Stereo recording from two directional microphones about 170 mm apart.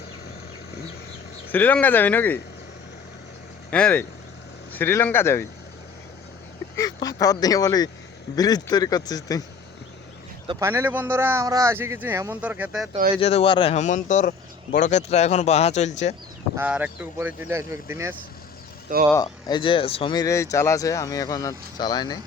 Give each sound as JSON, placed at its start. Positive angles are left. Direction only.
{"t": 1.5, "sound": "speech", "side_deg": 10}
{"t": 3.7, "sound": "speech", "side_deg": 10}
{"t": 6.7, "sound": "speech", "side_deg": 20}
{"t": 10.6, "sound": "speech", "side_deg": -15}
{"t": 13.1, "sound": "speech", "side_deg": 35}
{"t": 16.6, "sound": "speech", "side_deg": -10}
{"t": 19.1, "sound": "speech", "side_deg": 25}